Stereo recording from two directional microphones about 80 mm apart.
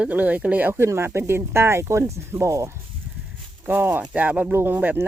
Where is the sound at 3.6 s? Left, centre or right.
Right.